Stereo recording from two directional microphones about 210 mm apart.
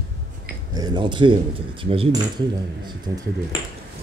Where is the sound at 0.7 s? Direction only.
20° right (ahead or behind).